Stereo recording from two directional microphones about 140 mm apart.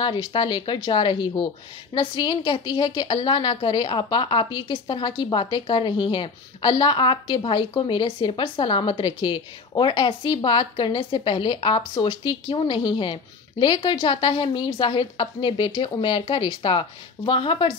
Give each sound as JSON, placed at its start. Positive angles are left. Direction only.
{"t": 0.0, "sound": "a woman's voice", "side_deg": 35}